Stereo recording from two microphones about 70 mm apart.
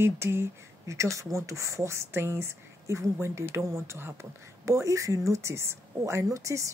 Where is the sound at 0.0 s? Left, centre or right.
Right.